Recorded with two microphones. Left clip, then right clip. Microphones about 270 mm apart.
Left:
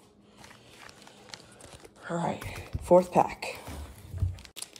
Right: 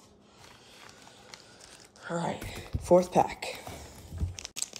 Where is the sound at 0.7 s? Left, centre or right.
Left.